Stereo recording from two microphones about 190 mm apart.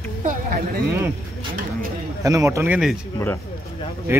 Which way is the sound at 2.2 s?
15° right (ahead or behind).